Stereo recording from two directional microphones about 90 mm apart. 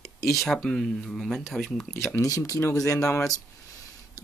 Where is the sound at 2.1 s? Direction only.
40° left (ahead or behind).